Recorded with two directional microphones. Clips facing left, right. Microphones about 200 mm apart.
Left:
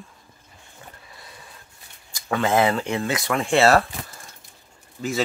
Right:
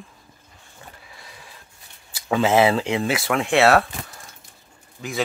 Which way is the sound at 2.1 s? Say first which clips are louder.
Right 3 dB; 10° right (ahead or behind).